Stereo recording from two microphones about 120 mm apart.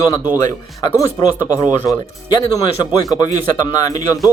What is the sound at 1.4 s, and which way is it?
Speech, 30° left (ahead or behind).